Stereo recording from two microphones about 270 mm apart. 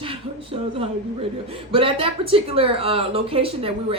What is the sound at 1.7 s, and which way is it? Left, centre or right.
A woman's voice, right.